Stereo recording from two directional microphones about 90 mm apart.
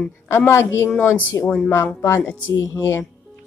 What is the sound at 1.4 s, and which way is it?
Speech, 10° left (ahead or behind).